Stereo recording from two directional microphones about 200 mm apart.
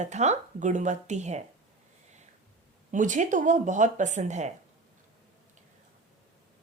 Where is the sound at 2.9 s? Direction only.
40° right (ahead or behind).